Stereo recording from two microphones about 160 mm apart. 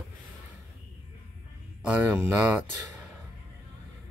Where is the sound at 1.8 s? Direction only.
10° right (ahead or behind).